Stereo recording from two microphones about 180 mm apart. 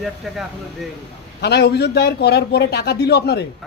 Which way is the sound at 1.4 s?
65° left (ahead or behind).